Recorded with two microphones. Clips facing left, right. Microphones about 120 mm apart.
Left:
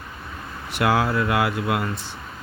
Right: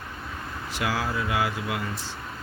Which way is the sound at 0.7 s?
60° left (ahead or behind).